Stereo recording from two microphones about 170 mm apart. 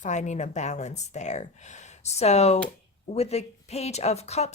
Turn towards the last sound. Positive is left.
turn(degrees=40)  # may be behind; listen again after turning